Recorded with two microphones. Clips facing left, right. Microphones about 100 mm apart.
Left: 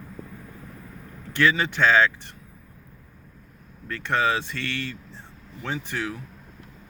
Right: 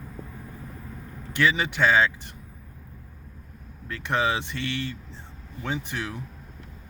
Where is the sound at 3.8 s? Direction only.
15° right (ahead or behind).